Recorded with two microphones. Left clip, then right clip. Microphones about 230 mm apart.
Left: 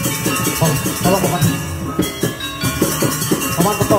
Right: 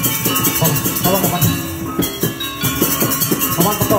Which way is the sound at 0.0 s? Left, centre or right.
Right.